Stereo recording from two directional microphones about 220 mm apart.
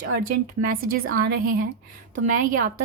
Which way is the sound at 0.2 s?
40° right (ahead or behind).